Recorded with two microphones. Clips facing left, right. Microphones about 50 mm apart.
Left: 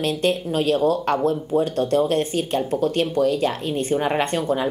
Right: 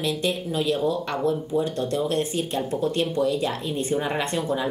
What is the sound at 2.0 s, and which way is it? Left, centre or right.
A woman's voice, left.